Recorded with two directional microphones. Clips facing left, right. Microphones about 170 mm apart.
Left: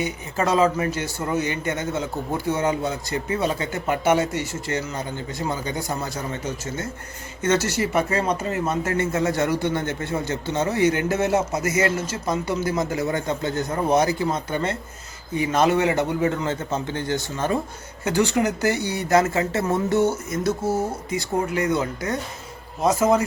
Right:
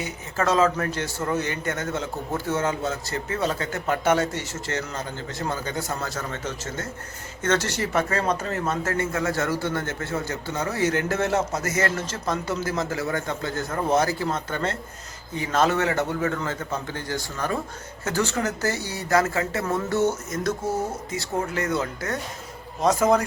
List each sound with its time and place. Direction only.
0.0 s a man's voice: 15° left (ahead or behind)